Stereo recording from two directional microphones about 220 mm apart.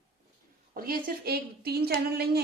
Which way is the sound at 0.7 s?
40° right (ahead or behind).